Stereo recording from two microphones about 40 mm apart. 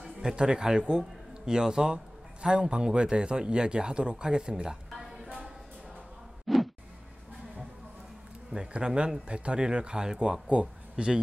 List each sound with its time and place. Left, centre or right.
0.2 s a man's voice: centre
4.9 s music: centre
6.4 s a sound: centre
8.5 s a man's voice: right